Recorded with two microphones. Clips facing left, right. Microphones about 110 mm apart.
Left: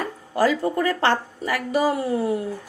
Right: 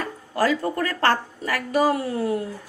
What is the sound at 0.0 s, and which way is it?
Speech, 15° left (ahead or behind).